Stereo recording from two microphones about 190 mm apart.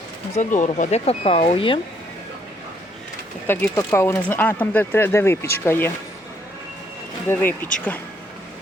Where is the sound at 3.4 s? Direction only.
15° left (ahead or behind).